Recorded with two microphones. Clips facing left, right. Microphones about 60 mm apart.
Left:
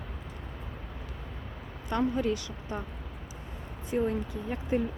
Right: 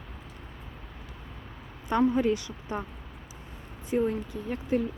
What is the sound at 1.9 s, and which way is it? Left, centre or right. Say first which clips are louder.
Speech: right 4 dB; centre.